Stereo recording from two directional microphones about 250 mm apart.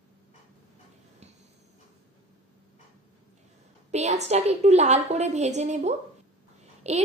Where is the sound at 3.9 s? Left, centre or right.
Right.